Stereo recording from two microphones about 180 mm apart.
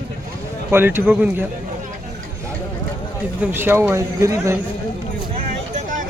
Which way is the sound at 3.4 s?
10° right (ahead or behind).